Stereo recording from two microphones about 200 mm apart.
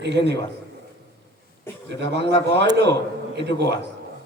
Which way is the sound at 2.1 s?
60° right (ahead or behind).